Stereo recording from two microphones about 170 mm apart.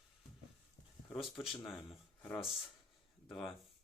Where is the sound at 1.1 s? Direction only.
Centre (ahead or behind).